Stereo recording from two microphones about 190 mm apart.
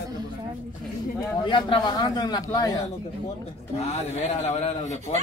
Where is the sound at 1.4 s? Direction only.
25° left (ahead or behind).